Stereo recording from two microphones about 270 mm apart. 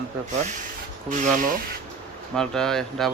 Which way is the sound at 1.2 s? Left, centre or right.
Right.